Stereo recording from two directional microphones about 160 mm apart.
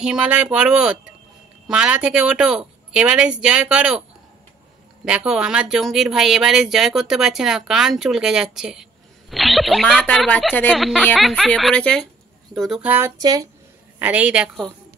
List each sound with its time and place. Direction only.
0.0 s speech: 5° right (ahead or behind)
5.0 s speech: 5° right (ahead or behind)
13.2 s speech: 25° right (ahead or behind)
13.9 s speech: 10° right (ahead or behind)